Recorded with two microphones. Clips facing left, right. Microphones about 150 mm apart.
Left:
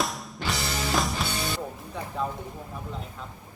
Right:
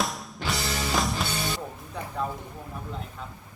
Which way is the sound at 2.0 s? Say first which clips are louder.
Even; centre (ahead or behind).